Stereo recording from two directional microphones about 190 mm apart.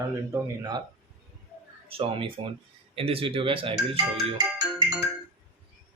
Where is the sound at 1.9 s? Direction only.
30° right (ahead or behind).